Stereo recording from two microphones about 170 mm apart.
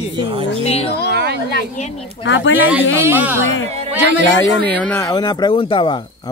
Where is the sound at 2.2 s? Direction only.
90° left.